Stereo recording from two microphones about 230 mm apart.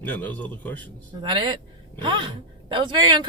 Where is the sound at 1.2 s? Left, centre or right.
Right.